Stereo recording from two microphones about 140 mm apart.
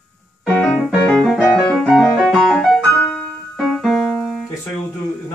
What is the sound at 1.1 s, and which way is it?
Music, centre (ahead or behind).